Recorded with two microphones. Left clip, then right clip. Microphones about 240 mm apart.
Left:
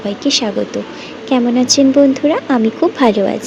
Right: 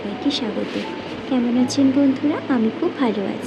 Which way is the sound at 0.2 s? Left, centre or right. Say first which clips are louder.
Left 7 dB; left.